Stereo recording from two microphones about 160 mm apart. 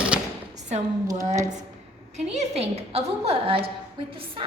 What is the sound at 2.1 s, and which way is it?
A woman's voice, 40° right (ahead or behind).